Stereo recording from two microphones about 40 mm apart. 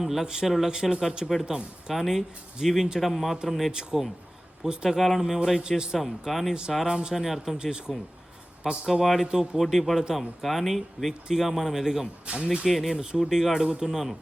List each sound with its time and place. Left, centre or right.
0.0 s speech: centre
3.1 s speech: centre
4.9 s speech: centre
5.2 s speech: centre
6.0 s speech: centre
6.5 s speech: centre
8.9 s speech: centre
9.2 s speech: centre
9.6 s speech: centre
12.2 s speech: right
12.6 s speech: centre